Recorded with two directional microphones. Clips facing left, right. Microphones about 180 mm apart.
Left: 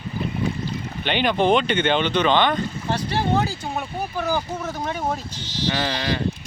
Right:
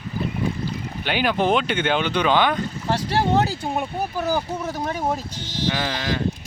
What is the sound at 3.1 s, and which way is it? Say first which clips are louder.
Speech: right 2 dB; 70° right (ahead or behind).